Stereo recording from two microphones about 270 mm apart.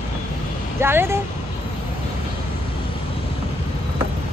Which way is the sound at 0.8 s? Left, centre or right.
Centre.